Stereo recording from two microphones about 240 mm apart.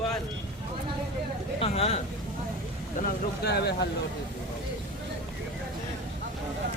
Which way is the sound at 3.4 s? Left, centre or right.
Left.